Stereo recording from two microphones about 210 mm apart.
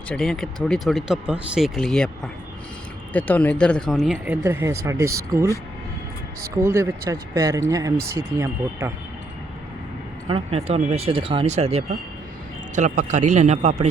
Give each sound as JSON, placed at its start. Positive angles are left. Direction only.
{"t": 0.1, "sound": "speech", "side_deg": 5}
{"t": 4.4, "sound": "speech", "side_deg": -15}
{"t": 10.2, "sound": "a man's voice", "side_deg": -25}